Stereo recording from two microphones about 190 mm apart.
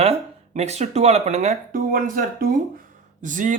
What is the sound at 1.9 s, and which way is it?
Speech, 45° right (ahead or behind).